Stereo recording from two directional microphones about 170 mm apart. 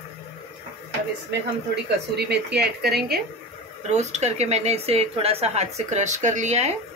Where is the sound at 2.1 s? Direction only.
75° right (ahead or behind).